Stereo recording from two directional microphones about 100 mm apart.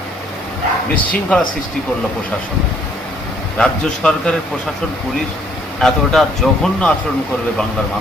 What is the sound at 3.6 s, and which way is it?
Speech, 10° left (ahead or behind).